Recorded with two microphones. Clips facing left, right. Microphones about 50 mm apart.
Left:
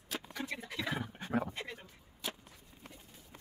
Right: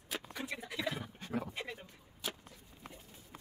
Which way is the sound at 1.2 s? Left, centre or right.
Centre.